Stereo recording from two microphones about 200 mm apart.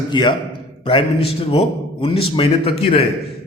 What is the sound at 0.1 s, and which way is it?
A man's voice, 25° left (ahead or behind).